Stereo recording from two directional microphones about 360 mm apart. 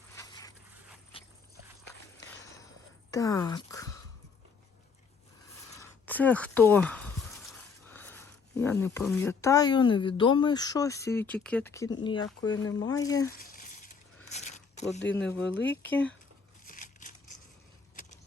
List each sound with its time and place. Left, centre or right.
0.1 s zipper: centre
3.1 s speech: centre
5.7 s speech: centre
13.4 s a sound: left
14.3 s mechanisms: centre
15.1 s speech: centre
15.4 s speech: left
15.7 s speech: centre
16.6 s a sound: left